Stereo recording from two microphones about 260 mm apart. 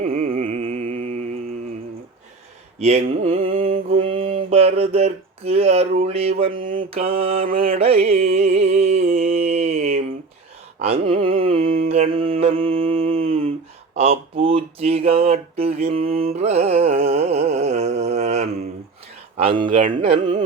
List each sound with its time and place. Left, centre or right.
0.0 s music: right
2.8 s mantra: right
7.6 s music: right
10.8 s mantra: right
13.9 s a sound: right
19.4 s carnatic music: centre